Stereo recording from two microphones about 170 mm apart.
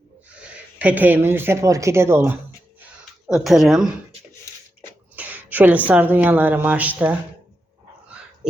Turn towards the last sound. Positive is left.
turn(degrees=-10)  # may be behind; listen again after turning